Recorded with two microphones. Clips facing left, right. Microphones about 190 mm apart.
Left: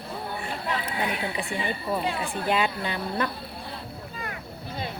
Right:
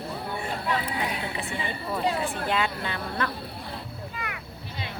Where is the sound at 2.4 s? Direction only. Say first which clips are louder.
Left 6 dB; 15° left (ahead or behind).